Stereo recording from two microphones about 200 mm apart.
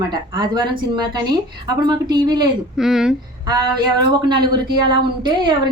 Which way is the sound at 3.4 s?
20° right (ahead or behind).